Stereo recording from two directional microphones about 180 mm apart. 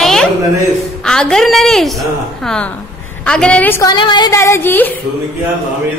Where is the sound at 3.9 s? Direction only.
25° left (ahead or behind).